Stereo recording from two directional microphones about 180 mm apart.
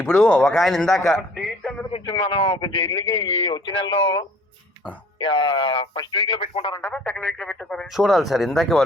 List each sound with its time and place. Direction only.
0.0 s speech: 10° left (ahead or behind)
1.9 s speech: 30° left (ahead or behind)
6.7 s speech: 10° left (ahead or behind)